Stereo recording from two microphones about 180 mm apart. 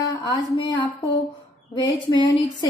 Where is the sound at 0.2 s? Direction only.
25° left (ahead or behind).